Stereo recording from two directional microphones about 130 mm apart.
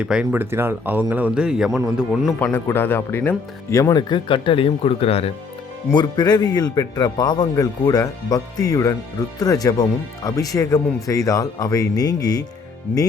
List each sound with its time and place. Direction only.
0.0 s a man's voice: 10° right (ahead or behind)
2.4 s speech: 15° left (ahead or behind); by 5.3 s 50° left (ahead or behind)
5.9 s speech: 35° left (ahead or behind)